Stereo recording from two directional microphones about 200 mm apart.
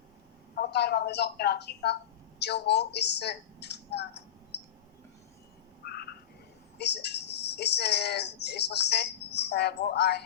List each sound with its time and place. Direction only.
0.5 s a woman's voice: 55° left (ahead or behind)
5.8 s frog: 50° left (ahead or behind)
6.7 s speech: 55° left (ahead or behind)